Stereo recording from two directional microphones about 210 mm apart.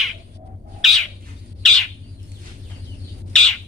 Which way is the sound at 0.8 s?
Centre (ahead or behind).